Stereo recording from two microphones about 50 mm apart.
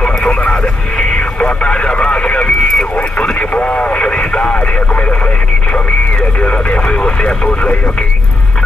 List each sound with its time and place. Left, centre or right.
0.0 s speech: left
6.4 s speech: centre